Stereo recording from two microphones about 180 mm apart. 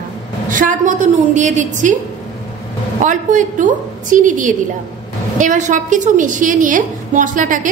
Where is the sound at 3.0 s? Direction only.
45° right (ahead or behind).